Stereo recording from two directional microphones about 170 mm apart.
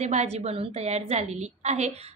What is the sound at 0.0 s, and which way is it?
A woman's voice, 40° right (ahead or behind).